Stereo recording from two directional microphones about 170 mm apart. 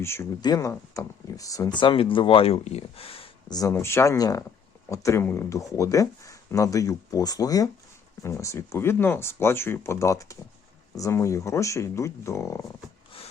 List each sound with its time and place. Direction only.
0.0 s speech: 15° left (ahead or behind); by 3.2 s 35° left (ahead or behind)
3.5 s speech: 20° left (ahead or behind)